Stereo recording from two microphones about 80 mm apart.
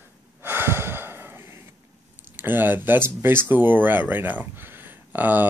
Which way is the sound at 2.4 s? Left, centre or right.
Right.